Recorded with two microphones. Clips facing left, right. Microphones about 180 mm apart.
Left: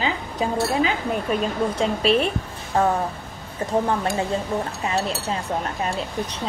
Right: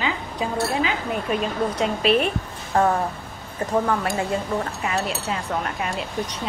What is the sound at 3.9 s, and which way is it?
A woman's voice, 25° left (ahead or behind).